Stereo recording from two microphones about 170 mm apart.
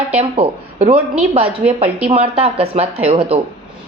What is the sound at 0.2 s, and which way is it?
Speech, 35° right (ahead or behind).